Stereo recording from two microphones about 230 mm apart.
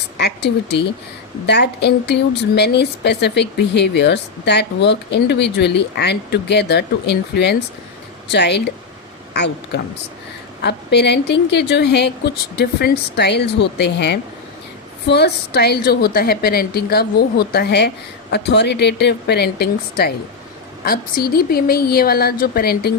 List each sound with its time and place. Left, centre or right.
0.2 s a woman's voice: left